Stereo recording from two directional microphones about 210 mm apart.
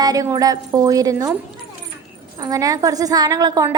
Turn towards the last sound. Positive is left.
turn(degrees=-20)  # may be behind; listen again after turning